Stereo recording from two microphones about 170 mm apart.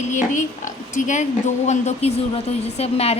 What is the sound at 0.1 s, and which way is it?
A woman's voice, 45° left (ahead or behind).